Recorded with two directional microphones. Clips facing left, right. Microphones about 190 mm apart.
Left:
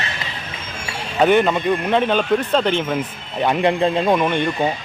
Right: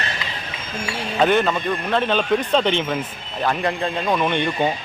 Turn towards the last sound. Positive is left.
turn(degrees=5)  # may be behind; listen again after turning